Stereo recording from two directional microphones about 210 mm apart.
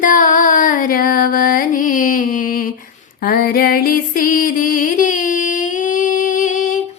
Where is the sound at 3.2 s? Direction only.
45° left (ahead or behind).